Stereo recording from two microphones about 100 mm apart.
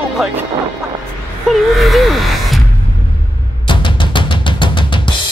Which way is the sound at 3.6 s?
55° left (ahead or behind).